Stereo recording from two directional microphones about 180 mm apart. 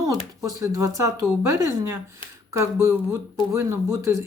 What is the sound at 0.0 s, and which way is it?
Speech, 15° right (ahead or behind).